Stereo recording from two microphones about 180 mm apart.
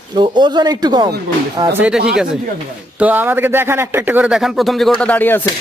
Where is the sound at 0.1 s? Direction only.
25° right (ahead or behind).